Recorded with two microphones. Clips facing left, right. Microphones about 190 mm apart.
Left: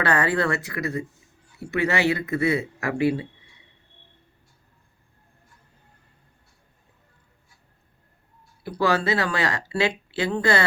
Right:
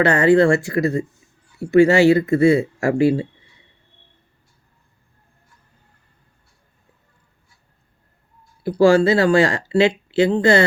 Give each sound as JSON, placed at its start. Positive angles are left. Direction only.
{"t": 0.0, "sound": "speech", "side_deg": -25}
{"t": 8.6, "sound": "speech", "side_deg": -30}